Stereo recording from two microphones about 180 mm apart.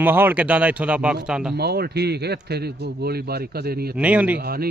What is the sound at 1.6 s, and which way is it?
Speech, 60° right (ahead or behind).